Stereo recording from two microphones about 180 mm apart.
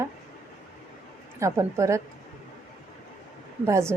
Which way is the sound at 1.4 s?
15° right (ahead or behind).